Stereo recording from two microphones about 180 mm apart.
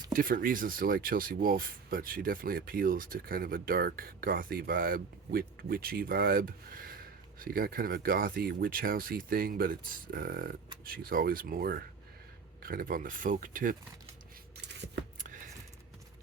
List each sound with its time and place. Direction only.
0.1 s a man's voice: 50° right (ahead or behind)